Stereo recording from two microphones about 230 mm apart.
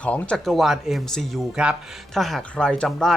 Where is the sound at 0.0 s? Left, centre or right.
Centre.